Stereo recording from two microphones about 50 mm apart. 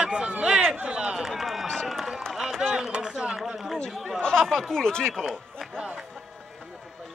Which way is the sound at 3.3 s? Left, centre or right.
Centre.